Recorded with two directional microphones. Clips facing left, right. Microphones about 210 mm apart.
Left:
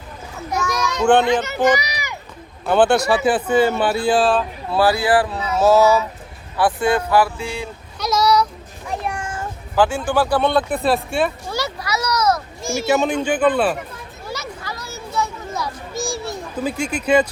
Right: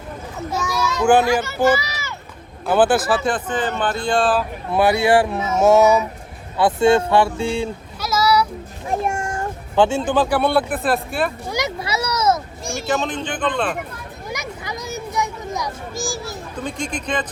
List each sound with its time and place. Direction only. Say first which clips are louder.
1.0 s speech: even; 5° right (ahead or behind)
1.3 s a child's voice: even; 20° left (ahead or behind)
2.6 s speech: left 1 dB; 5° right (ahead or behind)
3.2 s speech: left 6 dB; 10° left (ahead or behind)
4.7 s speech: right 1 dB; 20° right (ahead or behind)
7.9 s a sound: left 1 dB; 5° right (ahead or behind)
8.9 s a sound: right 4 dB; 45° right (ahead or behind)
9.7 s speech: right 1 dB; 25° right (ahead or behind); by 11.3 s centre (ahead or behind)
11.4 s a sound: right 1 dB; 15° right (ahead or behind)
12.6 s speech: left 5 dB; centre (ahead or behind)
14.3 s children playing: even; 15° right (ahead or behind)
16.0 s a sound: left 3 dB; centre (ahead or behind)